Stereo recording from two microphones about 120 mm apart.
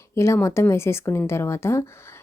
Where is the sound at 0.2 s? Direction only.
25° left (ahead or behind).